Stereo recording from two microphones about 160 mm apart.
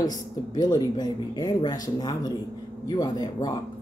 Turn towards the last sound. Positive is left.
turn(degrees=25)  # may be behind; listen again after turning